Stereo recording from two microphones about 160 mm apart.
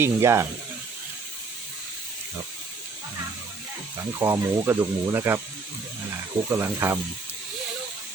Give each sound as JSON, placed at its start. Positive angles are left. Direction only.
{"t": 0.0, "sound": "speech", "side_deg": -20}
{"t": 4.2, "sound": "speech", "side_deg": -15}
{"t": 6.5, "sound": "speech", "side_deg": -15}